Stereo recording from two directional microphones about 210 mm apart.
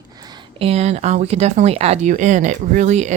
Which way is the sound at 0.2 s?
20° right (ahead or behind).